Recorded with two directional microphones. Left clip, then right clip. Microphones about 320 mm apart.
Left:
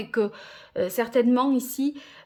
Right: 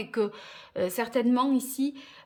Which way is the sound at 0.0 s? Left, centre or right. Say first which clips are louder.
Left 3 dB; centre.